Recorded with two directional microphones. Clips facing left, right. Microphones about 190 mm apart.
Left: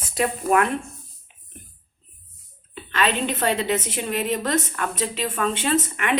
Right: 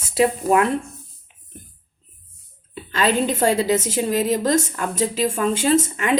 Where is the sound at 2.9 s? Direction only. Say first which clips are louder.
Right 4 dB; 30° right (ahead or behind).